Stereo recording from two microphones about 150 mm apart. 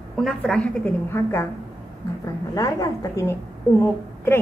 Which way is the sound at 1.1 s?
15° left (ahead or behind).